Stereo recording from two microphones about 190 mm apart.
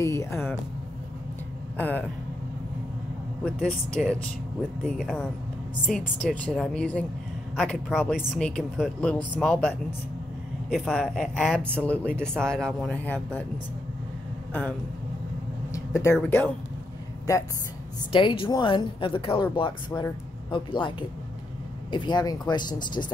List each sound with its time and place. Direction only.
0.0 s speech: 15° left (ahead or behind)
1.8 s speech: 10° left (ahead or behind)
4.0 s a woman's voice: centre (ahead or behind)
14.5 s speech: 10° left (ahead or behind)
18.1 s speech: 30° left (ahead or behind)
19.9 s speech: 15° left (ahead or behind)
20.5 s speech: 25° left (ahead or behind)
21.9 s speech: 25° left (ahead or behind)